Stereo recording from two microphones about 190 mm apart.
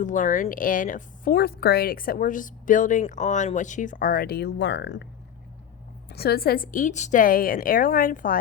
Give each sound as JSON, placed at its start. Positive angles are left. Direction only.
{"t": 0.0, "sound": "speech", "side_deg": 40}
{"t": 6.1, "sound": "speech", "side_deg": 55}